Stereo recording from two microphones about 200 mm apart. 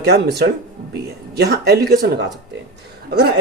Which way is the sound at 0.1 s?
55° right (ahead or behind).